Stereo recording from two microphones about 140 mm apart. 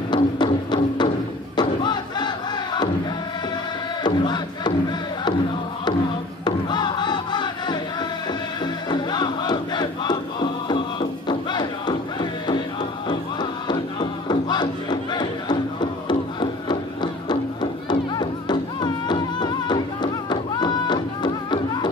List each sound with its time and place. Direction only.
0.1 s music: 30° left (ahead or behind)
1.6 s crowd: 30° left (ahead or behind)
4.0 s crowd: 30° left (ahead or behind)
6.4 s music: 30° left (ahead or behind)
8.8 s crowd: 30° left (ahead or behind)
13.1 s music: 30° left (ahead or behind)